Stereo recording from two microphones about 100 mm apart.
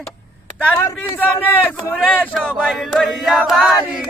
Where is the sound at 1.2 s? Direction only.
15° left (ahead or behind); by 3.1 s centre (ahead or behind).